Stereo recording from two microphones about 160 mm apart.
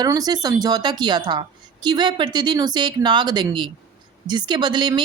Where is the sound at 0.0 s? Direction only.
25° right (ahead or behind).